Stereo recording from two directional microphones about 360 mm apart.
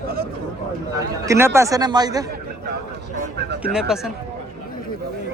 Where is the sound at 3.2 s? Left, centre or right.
Right.